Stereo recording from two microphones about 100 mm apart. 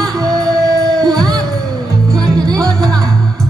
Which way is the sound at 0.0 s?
40° right (ahead or behind).